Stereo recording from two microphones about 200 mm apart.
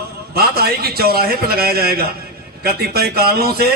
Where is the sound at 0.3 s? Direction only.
50° right (ahead or behind).